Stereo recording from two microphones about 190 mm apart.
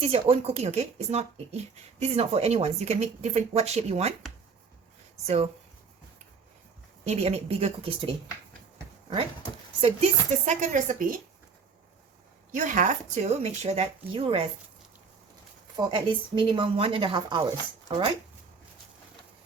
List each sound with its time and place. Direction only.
0.0 s speech: 30° right (ahead or behind)
5.2 s speech: 35° right (ahead or behind)
7.0 s speech: 35° right (ahead or behind)
9.8 s speech: 35° right (ahead or behind)
12.5 s speech: 45° right (ahead or behind)
15.7 s speech: 25° right (ahead or behind)